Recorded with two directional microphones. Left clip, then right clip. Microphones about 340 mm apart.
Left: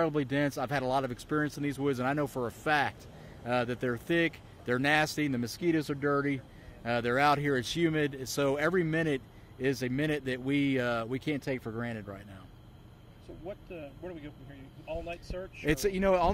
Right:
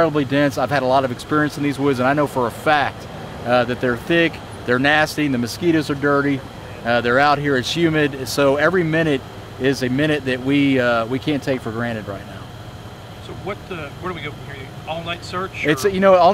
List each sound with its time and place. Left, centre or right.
0.0 s speech: left
15.6 s speech: left